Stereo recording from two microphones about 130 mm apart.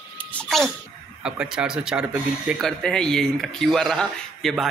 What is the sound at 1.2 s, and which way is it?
Speech, 5° right (ahead or behind).